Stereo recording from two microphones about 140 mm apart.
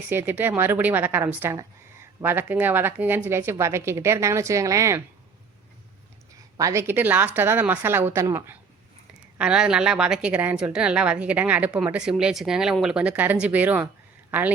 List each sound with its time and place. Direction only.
0.1 s a woman's voice: 15° right (ahead or behind)
6.6 s a woman's voice: 20° right (ahead or behind)
9.4 s a woman's voice: 5° right (ahead or behind)